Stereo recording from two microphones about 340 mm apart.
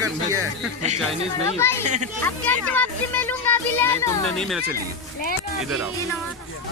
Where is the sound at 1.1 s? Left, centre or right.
Centre.